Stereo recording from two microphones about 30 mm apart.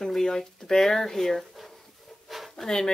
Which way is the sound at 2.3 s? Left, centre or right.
Centre.